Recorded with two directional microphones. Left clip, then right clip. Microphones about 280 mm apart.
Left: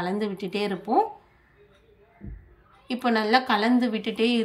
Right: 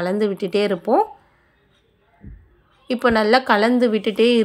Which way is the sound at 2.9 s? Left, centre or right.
Centre.